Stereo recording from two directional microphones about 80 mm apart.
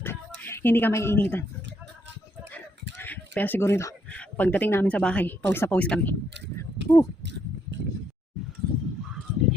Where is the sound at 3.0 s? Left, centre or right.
Left.